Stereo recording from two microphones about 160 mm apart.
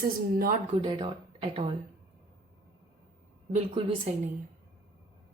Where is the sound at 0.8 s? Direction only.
30° right (ahead or behind).